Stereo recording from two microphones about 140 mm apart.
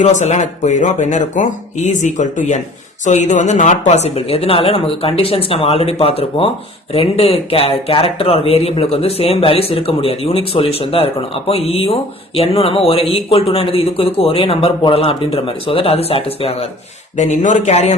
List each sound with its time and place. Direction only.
0.0 s speech: 60° left (ahead or behind)
17.2 s speech: 60° left (ahead or behind)